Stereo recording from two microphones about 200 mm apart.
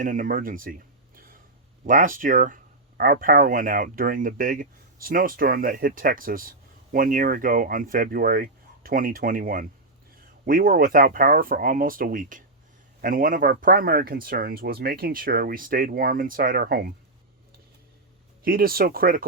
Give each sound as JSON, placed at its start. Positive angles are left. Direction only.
{"t": 0.0, "sound": "speech", "side_deg": -40}
{"t": 18.4, "sound": "speech", "side_deg": -45}